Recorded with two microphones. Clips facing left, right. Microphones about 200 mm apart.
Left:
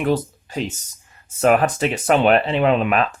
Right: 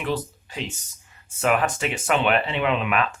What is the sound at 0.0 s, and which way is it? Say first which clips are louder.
Speech: left 7 dB; 45° left (ahead or behind).